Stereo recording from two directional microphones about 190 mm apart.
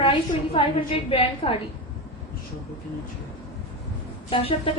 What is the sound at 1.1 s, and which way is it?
Speech, 30° left (ahead or behind).